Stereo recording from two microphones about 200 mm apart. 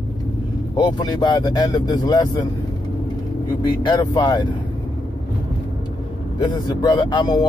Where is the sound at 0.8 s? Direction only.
20° left (ahead or behind).